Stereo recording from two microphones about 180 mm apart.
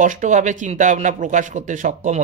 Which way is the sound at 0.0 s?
45° right (ahead or behind).